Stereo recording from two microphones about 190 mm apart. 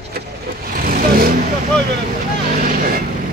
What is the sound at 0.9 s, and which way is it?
Vehicle, 50° right (ahead or behind).